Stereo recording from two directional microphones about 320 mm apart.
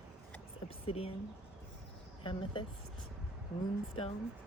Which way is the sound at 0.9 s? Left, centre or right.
Centre.